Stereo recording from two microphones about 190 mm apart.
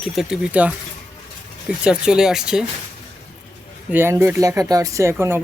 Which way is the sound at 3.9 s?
15° right (ahead or behind).